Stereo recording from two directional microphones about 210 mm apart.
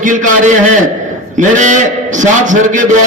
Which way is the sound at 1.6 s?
35° right (ahead or behind).